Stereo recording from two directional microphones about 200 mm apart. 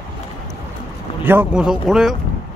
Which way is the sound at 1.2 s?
5° right (ahead or behind).